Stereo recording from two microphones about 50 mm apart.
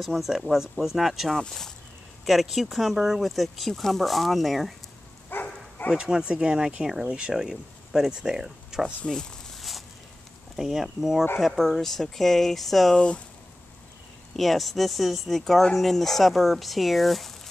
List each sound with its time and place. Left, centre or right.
0.0 s speech: centre
1.4 s speech: centre
2.2 s speech: centre
5.3 s dog: left
5.9 s speech: centre
9.0 s speech: centre
9.6 s a sound: centre
10.5 s speech: centre
11.3 s speech: centre
12.9 s speech: left
14.3 s speech: centre